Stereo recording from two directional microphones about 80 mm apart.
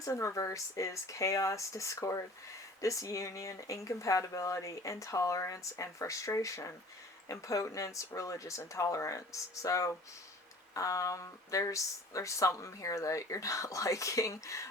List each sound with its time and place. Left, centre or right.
0.0 s speech: left